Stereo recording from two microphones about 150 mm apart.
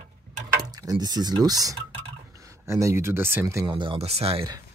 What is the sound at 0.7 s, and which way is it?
Speech, 25° right (ahead or behind).